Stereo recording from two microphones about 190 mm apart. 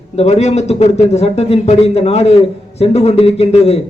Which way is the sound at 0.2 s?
35° left (ahead or behind).